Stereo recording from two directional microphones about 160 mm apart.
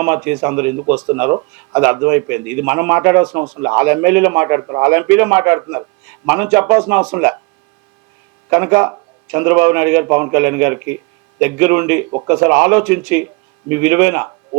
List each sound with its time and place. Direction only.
0.0 s speech: 10° right (ahead or behind)
8.4 s speech: 15° right (ahead or behind)